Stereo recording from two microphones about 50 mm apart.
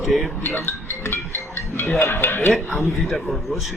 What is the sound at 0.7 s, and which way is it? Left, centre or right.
Speech, left.